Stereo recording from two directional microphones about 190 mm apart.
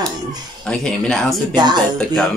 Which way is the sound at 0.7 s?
5° left (ahead or behind).